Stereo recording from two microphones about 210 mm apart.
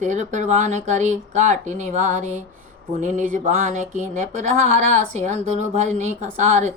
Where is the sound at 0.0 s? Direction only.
35° right (ahead or behind).